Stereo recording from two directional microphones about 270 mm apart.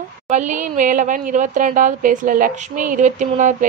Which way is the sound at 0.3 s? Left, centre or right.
Right.